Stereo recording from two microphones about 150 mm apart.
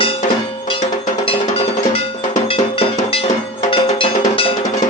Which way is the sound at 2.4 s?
35° left (ahead or behind).